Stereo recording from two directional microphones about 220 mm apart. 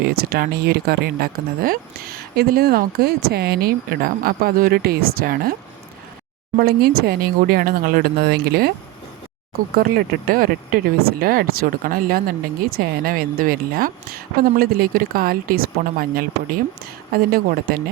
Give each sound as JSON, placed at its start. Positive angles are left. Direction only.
{"t": 0.0, "sound": "speech", "side_deg": -45}
{"t": 6.6, "sound": "speech", "side_deg": -45}
{"t": 9.7, "sound": "speech", "side_deg": -40}